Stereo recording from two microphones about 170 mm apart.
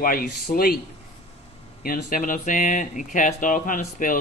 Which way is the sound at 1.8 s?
55° left (ahead or behind).